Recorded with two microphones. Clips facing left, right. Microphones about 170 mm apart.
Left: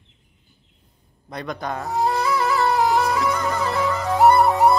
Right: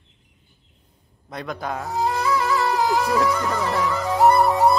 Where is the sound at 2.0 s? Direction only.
40° left (ahead or behind).